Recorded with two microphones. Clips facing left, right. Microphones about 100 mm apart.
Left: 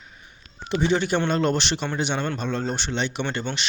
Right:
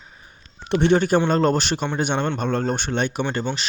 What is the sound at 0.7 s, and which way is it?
A man's voice, 60° right (ahead or behind).